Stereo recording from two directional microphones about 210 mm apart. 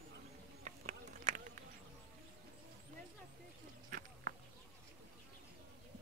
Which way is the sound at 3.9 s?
40° right (ahead or behind).